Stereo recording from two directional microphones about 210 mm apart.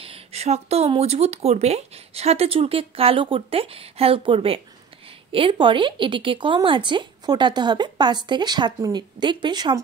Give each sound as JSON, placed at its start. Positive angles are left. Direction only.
{"t": 0.0, "sound": "speech", "side_deg": -30}